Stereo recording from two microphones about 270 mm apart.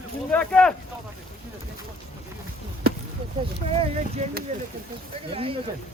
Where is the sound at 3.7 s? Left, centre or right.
Right.